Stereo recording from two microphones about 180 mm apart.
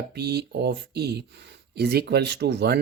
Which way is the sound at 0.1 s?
65° right (ahead or behind).